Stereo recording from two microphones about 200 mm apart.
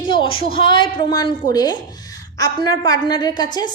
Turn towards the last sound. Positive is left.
turn(degrees=20)  # may be behind; listen again after turning